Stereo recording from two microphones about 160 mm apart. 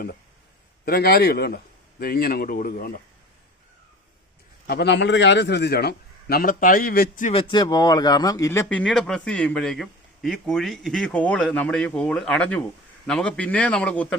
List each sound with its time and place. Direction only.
0.9 s a man's voice: 70° left (ahead or behind)
4.6 s a man's voice: 85° left; by 7.3 s 65° left (ahead or behind)
7.3 s speech: 35° left (ahead or behind); by 14.2 s 10° left (ahead or behind)